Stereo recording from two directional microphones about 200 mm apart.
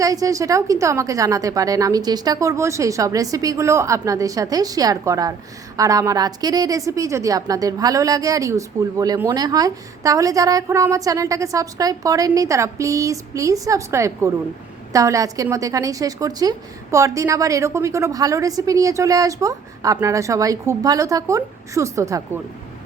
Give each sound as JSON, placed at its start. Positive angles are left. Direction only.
{"t": 0.0, "sound": "a woman's voice", "side_deg": -15}